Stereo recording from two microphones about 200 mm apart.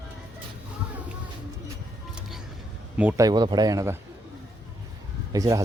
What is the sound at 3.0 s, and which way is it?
Speech, 10° right (ahead or behind).